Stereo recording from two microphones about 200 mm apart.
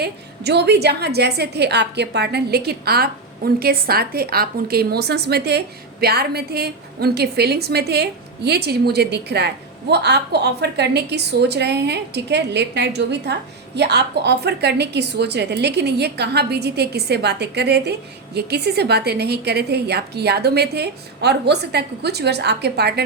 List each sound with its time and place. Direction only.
0.0 s a woman's voice: 55° right (ahead or behind)